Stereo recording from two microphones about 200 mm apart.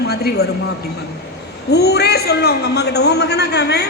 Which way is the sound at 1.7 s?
55° left (ahead or behind).